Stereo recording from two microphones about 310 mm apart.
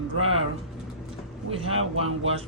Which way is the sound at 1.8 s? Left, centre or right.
Right.